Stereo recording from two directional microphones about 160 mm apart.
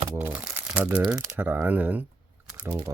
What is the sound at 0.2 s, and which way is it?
Speech, 10° right (ahead or behind).